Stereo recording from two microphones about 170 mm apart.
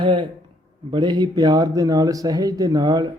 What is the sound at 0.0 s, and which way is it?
A man's voice, 30° right (ahead or behind).